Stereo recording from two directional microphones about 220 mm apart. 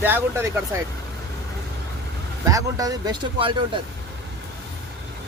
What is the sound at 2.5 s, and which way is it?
Speech, 15° right (ahead or behind).